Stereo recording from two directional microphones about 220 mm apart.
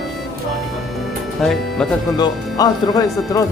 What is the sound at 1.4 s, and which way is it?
Speech, centre (ahead or behind).